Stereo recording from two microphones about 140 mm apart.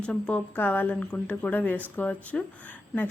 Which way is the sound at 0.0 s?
10° left (ahead or behind).